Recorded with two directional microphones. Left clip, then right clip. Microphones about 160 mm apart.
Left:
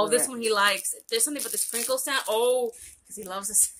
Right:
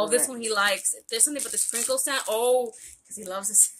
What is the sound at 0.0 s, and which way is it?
Speech, 20° left (ahead or behind).